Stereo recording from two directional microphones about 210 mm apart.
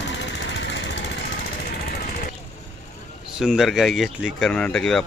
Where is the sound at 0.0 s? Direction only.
60° left (ahead or behind).